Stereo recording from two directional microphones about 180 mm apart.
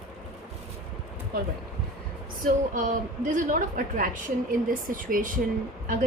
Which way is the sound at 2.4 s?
45° right (ahead or behind).